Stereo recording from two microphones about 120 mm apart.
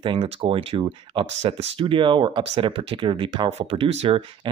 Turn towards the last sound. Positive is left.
turn(degrees=-55)  # may be behind; listen again after turning